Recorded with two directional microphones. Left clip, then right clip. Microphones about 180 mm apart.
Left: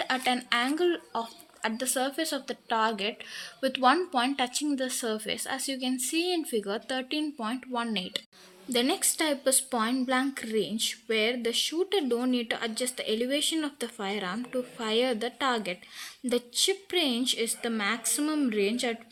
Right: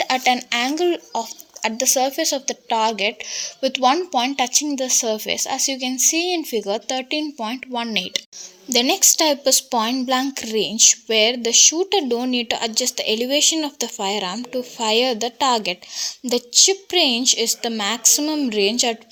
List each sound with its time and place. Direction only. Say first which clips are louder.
0.0 s a woman's voice: right 10 dB; 25° right (ahead or behind)